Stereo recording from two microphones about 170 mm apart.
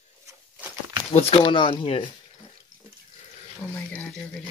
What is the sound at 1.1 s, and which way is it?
Speech, 35° left (ahead or behind).